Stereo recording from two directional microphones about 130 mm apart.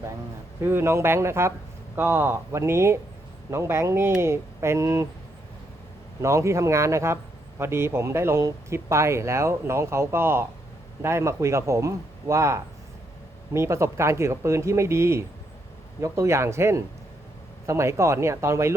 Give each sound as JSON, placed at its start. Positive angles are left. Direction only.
{"t": 0.6, "sound": "speech", "side_deg": -20}
{"t": 6.2, "sound": "speech", "side_deg": -25}